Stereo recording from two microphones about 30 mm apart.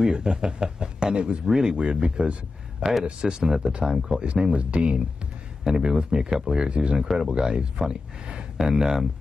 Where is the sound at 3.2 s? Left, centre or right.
Right.